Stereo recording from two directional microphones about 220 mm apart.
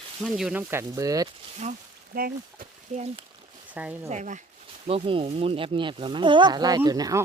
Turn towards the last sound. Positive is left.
turn(degrees=-15)  # may be behind; listen again after turning